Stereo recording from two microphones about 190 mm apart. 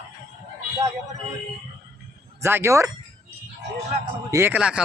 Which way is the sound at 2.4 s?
15° right (ahead or behind).